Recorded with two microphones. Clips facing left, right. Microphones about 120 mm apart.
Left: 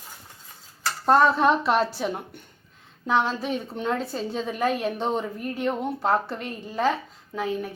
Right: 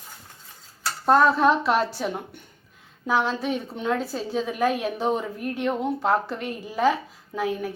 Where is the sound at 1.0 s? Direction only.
Centre (ahead or behind).